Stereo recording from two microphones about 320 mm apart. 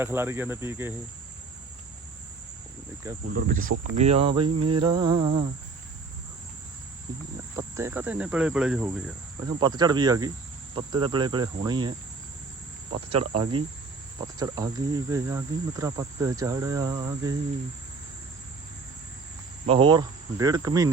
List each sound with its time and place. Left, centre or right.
0.0 s cricket: centre
3.3 s cricket: right
7.5 s speech: centre
9.5 s cricket: centre
19.6 s cricket: centre